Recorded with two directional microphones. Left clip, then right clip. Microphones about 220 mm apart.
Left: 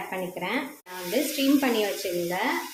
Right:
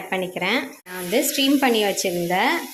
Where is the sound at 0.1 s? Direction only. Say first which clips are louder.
Right 9 dB; 30° right (ahead or behind).